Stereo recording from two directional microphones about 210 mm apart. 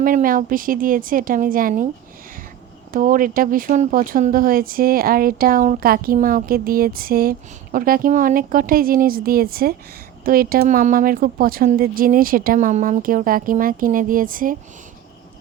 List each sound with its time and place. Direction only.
0.0 s speech: 40° right (ahead or behind)
2.9 s speech: 40° right (ahead or behind)